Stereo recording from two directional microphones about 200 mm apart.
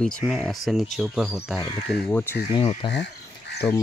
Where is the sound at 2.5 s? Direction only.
25° left (ahead or behind).